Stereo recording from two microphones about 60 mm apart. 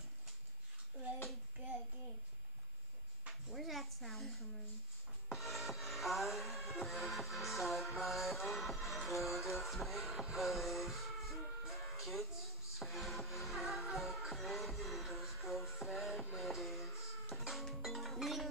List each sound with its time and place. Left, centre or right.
1.6 s child singing: right
3.4 s a sound: centre
5.3 s music: centre